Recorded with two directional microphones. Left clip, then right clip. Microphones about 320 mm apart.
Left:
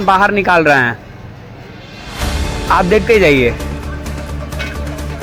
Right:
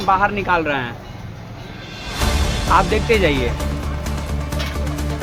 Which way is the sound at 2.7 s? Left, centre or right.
Centre.